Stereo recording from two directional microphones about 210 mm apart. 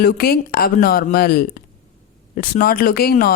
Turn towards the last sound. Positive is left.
turn(degrees=45)  # may be behind; listen again after turning